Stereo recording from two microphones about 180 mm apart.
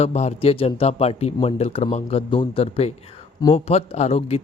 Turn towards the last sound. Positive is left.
turn(degrees=35)  # may be behind; listen again after turning